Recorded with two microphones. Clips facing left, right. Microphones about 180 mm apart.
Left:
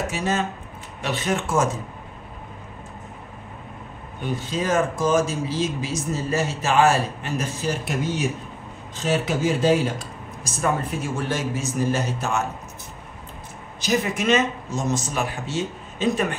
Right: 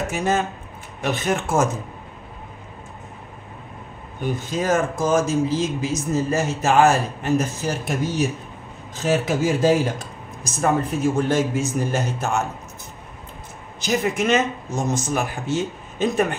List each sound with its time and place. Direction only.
0.1 s speech: 50° right (ahead or behind)
4.5 s speech: 45° right (ahead or behind)
13.7 s speech: 50° right (ahead or behind)